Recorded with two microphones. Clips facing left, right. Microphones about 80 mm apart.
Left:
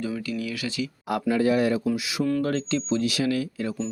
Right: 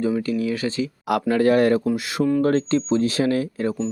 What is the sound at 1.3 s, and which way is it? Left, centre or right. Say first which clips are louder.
Speech: right 5 dB; right.